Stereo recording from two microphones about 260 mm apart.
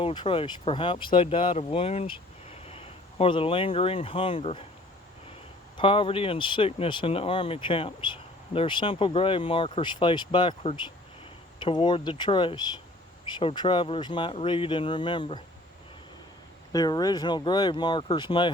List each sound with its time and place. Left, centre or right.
0.0 s speech: centre
5.7 s speech: centre
16.7 s speech: centre